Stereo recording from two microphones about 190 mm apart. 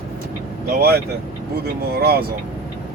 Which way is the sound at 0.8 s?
55° right (ahead or behind).